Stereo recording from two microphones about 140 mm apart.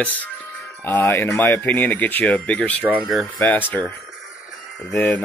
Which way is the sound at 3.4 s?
10° left (ahead or behind).